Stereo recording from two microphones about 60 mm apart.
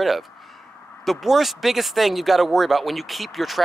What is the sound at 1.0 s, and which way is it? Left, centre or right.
Speech, centre.